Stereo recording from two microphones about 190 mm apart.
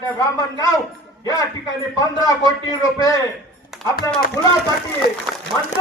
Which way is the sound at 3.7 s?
Centre (ahead or behind).